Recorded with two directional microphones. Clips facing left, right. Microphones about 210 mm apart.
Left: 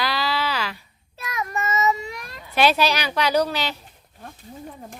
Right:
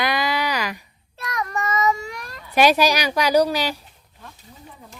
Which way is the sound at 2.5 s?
10° right (ahead or behind).